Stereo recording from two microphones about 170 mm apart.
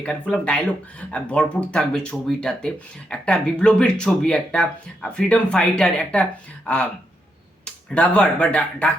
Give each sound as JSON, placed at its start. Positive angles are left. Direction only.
{"t": 0.0, "sound": "speech", "side_deg": 5}